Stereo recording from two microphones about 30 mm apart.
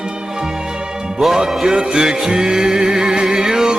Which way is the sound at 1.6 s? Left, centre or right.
Right.